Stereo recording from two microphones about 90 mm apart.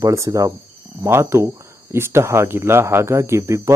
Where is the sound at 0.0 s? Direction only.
40° right (ahead or behind).